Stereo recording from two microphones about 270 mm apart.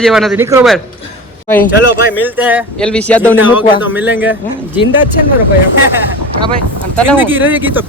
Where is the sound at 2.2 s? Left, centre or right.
Centre.